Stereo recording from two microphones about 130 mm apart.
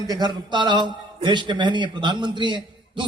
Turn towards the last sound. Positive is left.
turn(degrees=-35)  # may be behind; listen again after turning